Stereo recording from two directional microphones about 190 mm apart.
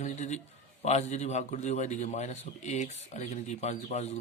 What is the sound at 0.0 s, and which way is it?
A man's voice, 40° left (ahead or behind).